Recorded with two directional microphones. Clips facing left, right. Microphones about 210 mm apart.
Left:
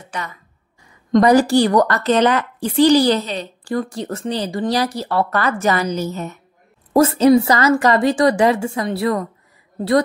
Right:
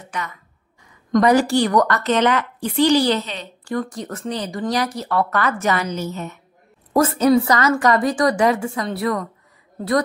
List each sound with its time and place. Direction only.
0.1 s a woman's voice: 30° left (ahead or behind)
6.9 s a woman's voice: 25° left (ahead or behind)